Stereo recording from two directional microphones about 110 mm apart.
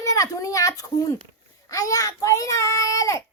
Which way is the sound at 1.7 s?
30° left (ahead or behind).